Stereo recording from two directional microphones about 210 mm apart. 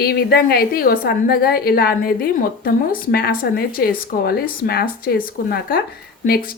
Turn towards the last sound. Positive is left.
turn(degrees=45)  # may be behind; listen again after turning